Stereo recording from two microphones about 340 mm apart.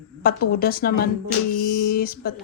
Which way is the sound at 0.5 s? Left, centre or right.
Left.